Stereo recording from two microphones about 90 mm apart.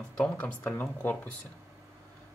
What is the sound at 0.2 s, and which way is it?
Speech, 15° left (ahead or behind).